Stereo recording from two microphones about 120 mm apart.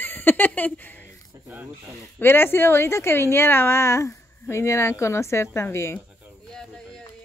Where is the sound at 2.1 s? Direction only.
20° left (ahead or behind).